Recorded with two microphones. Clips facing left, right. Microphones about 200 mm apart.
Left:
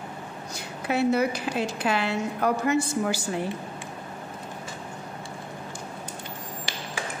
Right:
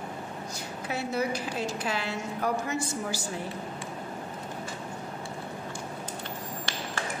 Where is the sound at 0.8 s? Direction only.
65° left (ahead or behind).